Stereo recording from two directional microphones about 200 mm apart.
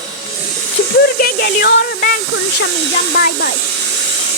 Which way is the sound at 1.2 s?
50° left (ahead or behind).